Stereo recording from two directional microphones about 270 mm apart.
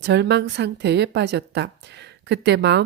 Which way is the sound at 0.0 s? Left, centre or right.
Right.